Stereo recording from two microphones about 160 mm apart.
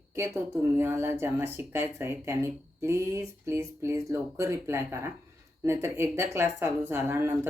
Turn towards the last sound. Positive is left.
turn(degrees=-15)  # may be behind; listen again after turning